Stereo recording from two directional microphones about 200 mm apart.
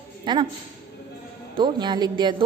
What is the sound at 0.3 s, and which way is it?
Speech, 20° right (ahead or behind).